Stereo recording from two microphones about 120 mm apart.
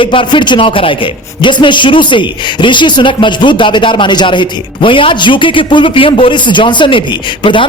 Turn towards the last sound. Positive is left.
turn(degrees=45)  # may be behind; listen again after turning